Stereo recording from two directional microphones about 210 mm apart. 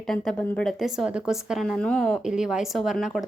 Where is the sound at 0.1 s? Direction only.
Centre (ahead or behind).